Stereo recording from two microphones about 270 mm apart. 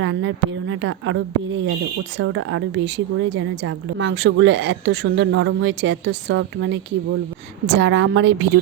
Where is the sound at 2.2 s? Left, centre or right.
Right.